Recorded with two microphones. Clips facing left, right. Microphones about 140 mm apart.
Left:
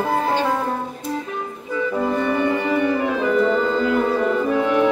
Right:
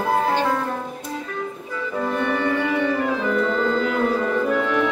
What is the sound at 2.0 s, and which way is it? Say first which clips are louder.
Music: left 1 dB; 15° left (ahead or behind).